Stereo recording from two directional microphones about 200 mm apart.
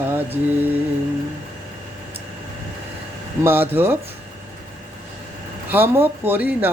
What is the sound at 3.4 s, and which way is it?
Speech, 10° right (ahead or behind).